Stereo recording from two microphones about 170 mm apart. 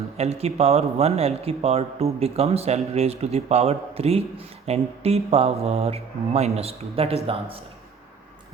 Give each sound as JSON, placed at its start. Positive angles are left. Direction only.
{"t": 0.2, "sound": "speech", "side_deg": -40}